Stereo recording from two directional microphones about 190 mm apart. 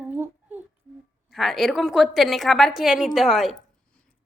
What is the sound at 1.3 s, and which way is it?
A woman's voice, centre (ahead or behind).